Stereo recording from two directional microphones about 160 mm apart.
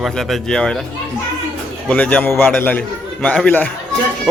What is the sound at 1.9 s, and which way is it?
A man's voice, 5° left (ahead or behind).